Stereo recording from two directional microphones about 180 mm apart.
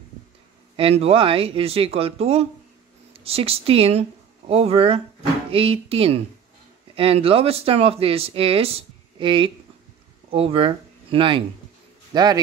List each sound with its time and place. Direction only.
0.7 s a man's voice: 35° right (ahead or behind)